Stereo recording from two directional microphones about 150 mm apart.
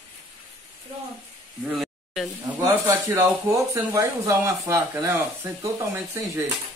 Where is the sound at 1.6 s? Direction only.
5° right (ahead or behind).